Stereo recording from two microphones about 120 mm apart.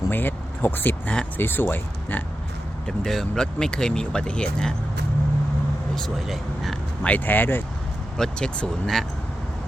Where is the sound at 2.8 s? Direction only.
Centre (ahead or behind).